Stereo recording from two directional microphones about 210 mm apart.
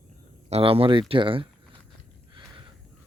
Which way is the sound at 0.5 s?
25° right (ahead or behind).